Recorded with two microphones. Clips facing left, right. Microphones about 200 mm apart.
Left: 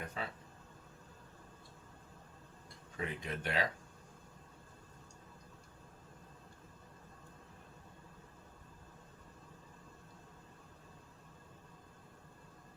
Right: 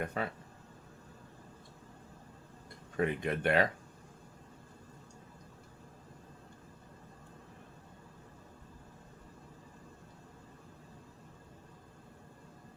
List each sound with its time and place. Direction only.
0.0 s speech: 60° right (ahead or behind)
3.0 s speech: 60° right (ahead or behind)